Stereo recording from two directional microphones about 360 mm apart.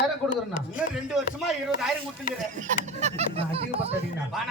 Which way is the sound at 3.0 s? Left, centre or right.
Centre.